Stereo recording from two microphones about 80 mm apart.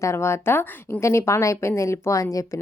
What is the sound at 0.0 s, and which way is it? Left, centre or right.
Speech, left.